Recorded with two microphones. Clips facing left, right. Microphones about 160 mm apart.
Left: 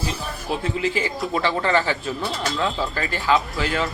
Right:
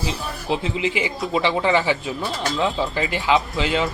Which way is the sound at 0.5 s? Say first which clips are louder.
Right 1 dB; 20° right (ahead or behind).